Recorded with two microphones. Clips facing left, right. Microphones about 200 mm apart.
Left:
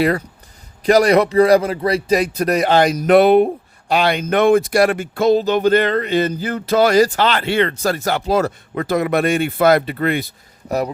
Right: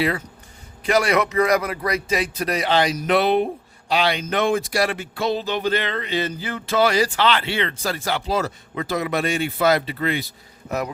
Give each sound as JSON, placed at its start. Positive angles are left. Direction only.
{"t": 0.9, "sound": "speech", "side_deg": 35}
{"t": 10.7, "sound": "speech", "side_deg": 35}